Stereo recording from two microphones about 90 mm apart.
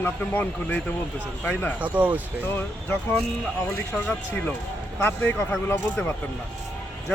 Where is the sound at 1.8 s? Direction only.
20° right (ahead or behind).